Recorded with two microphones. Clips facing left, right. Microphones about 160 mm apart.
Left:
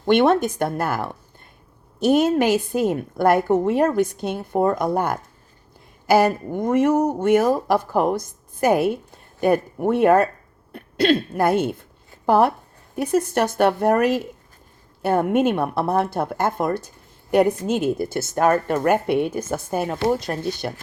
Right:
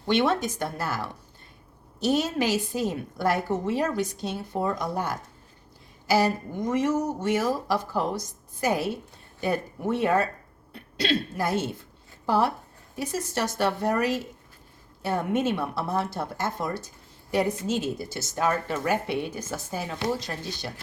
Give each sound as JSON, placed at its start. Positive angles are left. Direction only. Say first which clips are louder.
{"t": 0.0, "sound": "a woman's voice", "louder": "left 7 dB", "side_deg": 55}